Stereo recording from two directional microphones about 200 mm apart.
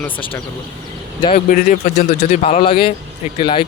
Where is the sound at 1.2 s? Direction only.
25° left (ahead or behind).